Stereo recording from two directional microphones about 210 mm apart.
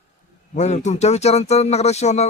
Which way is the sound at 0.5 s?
35° left (ahead or behind).